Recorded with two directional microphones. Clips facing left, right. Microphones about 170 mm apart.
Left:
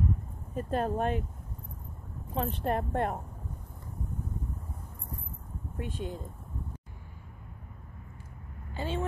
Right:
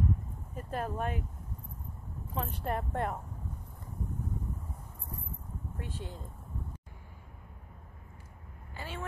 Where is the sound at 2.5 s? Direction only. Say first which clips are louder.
Left 5 dB; 25° left (ahead or behind).